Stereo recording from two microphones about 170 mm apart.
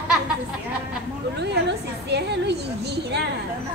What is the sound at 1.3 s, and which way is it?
A woman's voice, 85° right.